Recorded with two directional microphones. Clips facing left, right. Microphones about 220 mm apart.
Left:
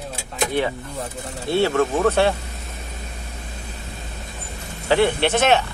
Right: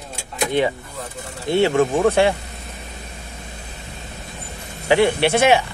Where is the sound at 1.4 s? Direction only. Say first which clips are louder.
Right 2 dB; 20° right (ahead or behind).